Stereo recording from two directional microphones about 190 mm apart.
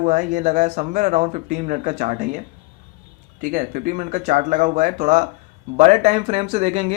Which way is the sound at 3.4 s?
45° right (ahead or behind).